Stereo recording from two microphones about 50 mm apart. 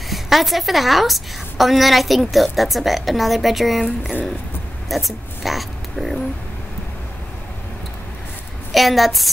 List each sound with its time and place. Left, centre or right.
0.1 s a woman's voice: centre
3.8 s speech: centre
4.8 s a sound: centre
8.7 s a woman's voice: centre